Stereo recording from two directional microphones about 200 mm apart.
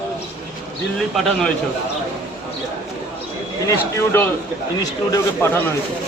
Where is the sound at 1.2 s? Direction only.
Centre (ahead or behind).